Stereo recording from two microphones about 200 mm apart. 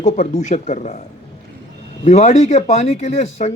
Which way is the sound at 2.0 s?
35° left (ahead or behind).